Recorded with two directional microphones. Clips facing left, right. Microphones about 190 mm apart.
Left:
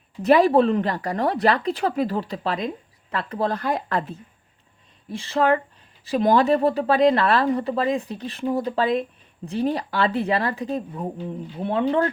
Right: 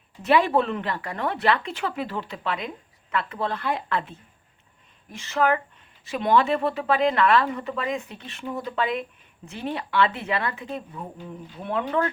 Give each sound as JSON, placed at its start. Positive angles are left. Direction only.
{"t": 0.2, "sound": "speech", "side_deg": 40}